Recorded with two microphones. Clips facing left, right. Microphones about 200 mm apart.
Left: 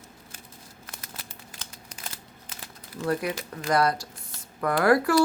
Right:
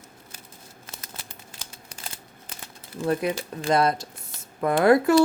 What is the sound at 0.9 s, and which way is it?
Crumpling, 25° right (ahead or behind).